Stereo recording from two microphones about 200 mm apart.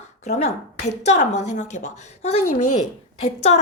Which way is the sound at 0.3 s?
30° left (ahead or behind).